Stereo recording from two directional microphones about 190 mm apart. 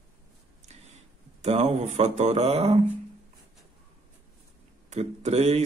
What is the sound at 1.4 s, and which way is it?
A man's voice, 35° right (ahead or behind).